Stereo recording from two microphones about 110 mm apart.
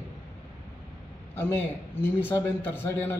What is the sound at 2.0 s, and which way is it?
A man's voice, 20° left (ahead or behind).